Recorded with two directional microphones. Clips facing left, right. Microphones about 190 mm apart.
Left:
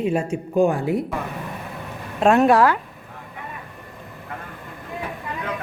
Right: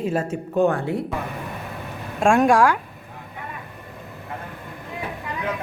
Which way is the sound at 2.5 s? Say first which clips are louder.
Left 1 dB; 10° right (ahead or behind).